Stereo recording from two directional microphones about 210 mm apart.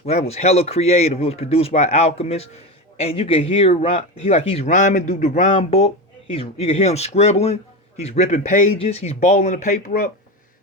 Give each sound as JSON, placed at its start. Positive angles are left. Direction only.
{"t": 0.0, "sound": "speech", "side_deg": 30}